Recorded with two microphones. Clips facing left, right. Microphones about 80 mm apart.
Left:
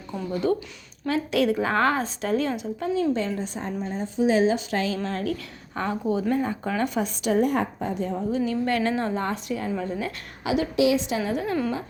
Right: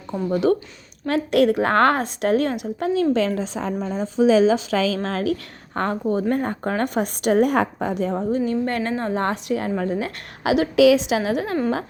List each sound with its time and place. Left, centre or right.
0.3 s a woman's voice: right
1.0 s a woman's voice: right
5.7 s a woman's voice: right
8.3 s a woman's voice: right
9.1 s a woman's voice: right